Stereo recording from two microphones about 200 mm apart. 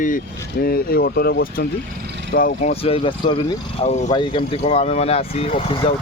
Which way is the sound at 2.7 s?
30° left (ahead or behind).